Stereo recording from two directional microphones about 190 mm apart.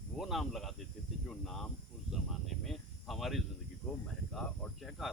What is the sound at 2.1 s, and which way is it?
Cricket, centre (ahead or behind).